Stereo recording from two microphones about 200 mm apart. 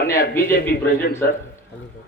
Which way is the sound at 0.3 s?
10° left (ahead or behind).